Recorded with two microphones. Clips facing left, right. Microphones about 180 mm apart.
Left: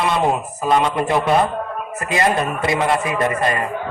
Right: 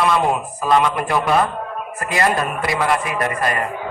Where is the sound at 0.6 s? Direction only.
25° left (ahead or behind).